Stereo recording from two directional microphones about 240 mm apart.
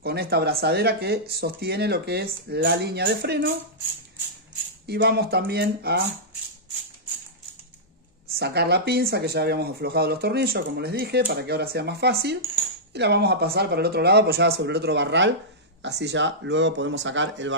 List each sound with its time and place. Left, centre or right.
0.0 s speech: right
4.8 s speech: right
8.4 s speech: right